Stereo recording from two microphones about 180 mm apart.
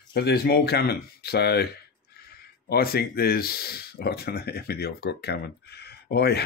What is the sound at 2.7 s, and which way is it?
Speech, 60° left (ahead or behind).